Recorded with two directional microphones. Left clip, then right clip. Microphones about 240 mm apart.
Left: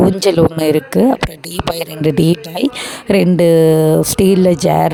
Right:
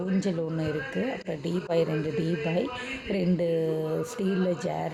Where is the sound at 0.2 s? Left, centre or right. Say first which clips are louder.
Left 18 dB; left.